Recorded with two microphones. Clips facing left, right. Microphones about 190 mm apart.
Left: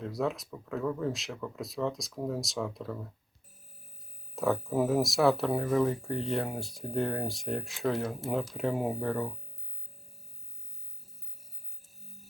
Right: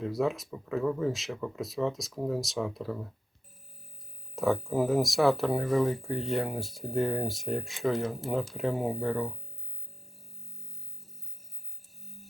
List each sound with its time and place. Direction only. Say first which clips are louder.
0.0 s speech: right 3 dB; centre (ahead or behind)
4.4 s speech: right 1 dB; centre (ahead or behind)